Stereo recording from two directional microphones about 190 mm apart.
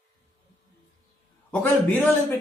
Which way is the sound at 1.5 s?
5° left (ahead or behind).